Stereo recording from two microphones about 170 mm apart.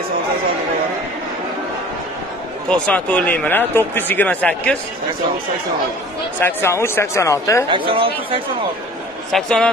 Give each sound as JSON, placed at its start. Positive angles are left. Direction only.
{"t": 2.7, "sound": "speech", "side_deg": 10}
{"t": 6.4, "sound": "speech", "side_deg": 15}
{"t": 7.7, "sound": "speech", "side_deg": -30}
{"t": 9.3, "sound": "a man's voice", "side_deg": 5}